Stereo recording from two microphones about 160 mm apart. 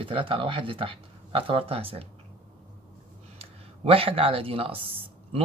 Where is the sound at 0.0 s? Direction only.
35° right (ahead or behind).